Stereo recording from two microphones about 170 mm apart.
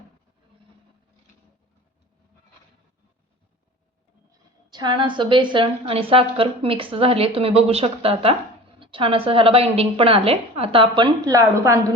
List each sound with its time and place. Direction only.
4.7 s a woman's voice: 25° right (ahead or behind)